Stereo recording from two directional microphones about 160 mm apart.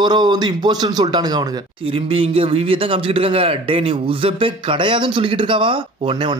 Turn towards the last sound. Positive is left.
turn(degrees=-30)  # may be behind; listen again after turning